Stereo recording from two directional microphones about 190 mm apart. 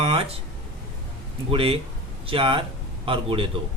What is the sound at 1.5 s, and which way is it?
A man's voice, 30° right (ahead or behind).